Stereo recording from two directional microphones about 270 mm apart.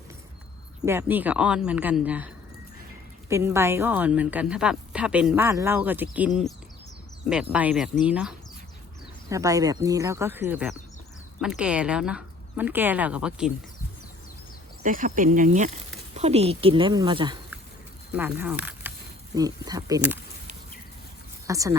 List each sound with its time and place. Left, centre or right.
0.9 s a woman's voice: centre
14.8 s speech: right
18.2 s speech: centre
21.4 s speech: centre